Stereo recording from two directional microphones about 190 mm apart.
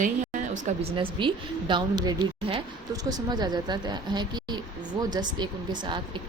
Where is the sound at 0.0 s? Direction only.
40° right (ahead or behind).